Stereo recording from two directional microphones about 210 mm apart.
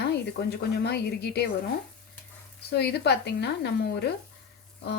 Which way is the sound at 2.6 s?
50° left (ahead or behind).